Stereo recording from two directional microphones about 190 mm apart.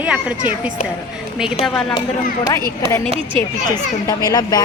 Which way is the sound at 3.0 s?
30° right (ahead or behind).